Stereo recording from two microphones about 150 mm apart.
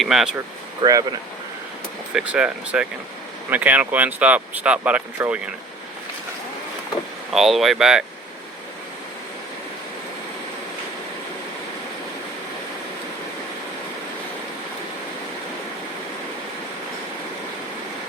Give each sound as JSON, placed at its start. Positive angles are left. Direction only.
{"t": 0.0, "sound": "speech", "side_deg": 0}
{"t": 0.8, "sound": "speech", "side_deg": -25}
{"t": 2.1, "sound": "speech", "side_deg": -5}
{"t": 7.3, "sound": "speech", "side_deg": 0}